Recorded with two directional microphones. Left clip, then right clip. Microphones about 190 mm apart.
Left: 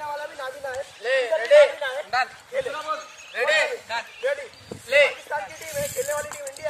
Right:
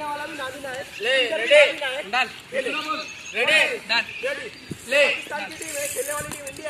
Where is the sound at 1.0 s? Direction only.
30° right (ahead or behind).